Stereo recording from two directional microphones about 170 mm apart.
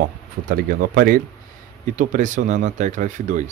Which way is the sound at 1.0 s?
55° right (ahead or behind).